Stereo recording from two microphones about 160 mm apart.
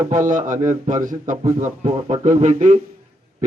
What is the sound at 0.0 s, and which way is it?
A man's voice, 50° right (ahead or behind).